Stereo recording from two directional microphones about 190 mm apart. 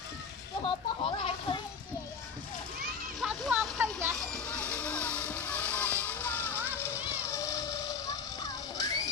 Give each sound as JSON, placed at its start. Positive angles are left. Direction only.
{"t": 0.6, "sound": "speech", "side_deg": 25}
{"t": 3.2, "sound": "a sound", "side_deg": -5}
{"t": 4.1, "sound": "vehicle", "side_deg": 5}
{"t": 7.3, "sound": "music", "side_deg": 15}